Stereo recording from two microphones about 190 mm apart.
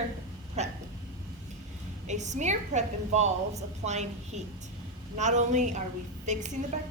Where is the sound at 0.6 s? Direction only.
35° right (ahead or behind).